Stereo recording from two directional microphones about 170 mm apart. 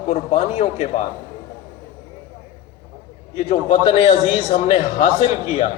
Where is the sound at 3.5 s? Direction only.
40° left (ahead or behind).